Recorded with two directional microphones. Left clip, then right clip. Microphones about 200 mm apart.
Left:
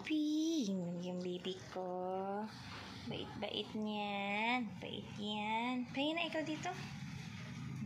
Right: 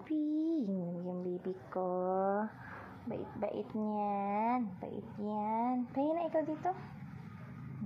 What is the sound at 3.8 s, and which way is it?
A woman's voice, 15° right (ahead or behind).